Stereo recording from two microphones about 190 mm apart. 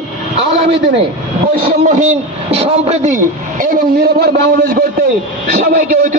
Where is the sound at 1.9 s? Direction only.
40° right (ahead or behind).